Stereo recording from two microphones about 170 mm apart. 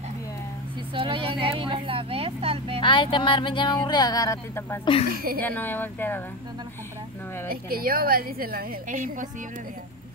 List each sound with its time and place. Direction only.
0.9 s speech: 30° right (ahead or behind)
2.8 s speech: 30° left (ahead or behind)
4.8 s a woman's voice: 35° left (ahead or behind)
5.1 s a woman's voice: 60° right (ahead or behind)
5.4 s speech: 10° left (ahead or behind)
7.4 s a woman's voice: 60° right (ahead or behind)